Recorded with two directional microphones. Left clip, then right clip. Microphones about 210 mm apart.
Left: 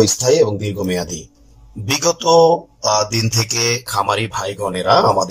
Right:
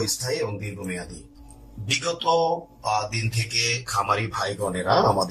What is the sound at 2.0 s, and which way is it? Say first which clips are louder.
Speech: left 10 dB; 30° left (ahead or behind).